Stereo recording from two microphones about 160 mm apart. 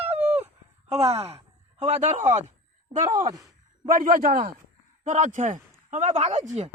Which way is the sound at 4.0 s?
65° right (ahead or behind).